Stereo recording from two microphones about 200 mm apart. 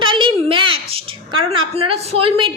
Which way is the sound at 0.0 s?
25° right (ahead or behind).